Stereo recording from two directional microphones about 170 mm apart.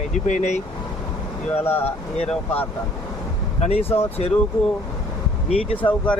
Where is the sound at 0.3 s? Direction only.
45° left (ahead or behind).